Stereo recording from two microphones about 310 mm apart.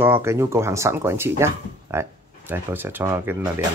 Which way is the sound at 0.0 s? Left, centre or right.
Centre.